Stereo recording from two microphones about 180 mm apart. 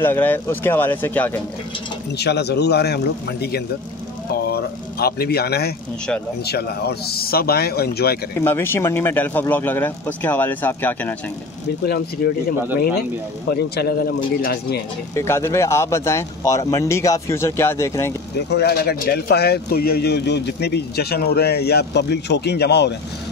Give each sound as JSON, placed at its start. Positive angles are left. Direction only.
{"t": 0.0, "sound": "speech", "side_deg": 10}
{"t": 2.1, "sound": "speech", "side_deg": 65}
{"t": 8.4, "sound": "speech", "side_deg": 15}
{"t": 11.8, "sound": "speech", "side_deg": 60}
{"t": 15.1, "sound": "speech", "side_deg": 15}
{"t": 18.5, "sound": "speech", "side_deg": 65}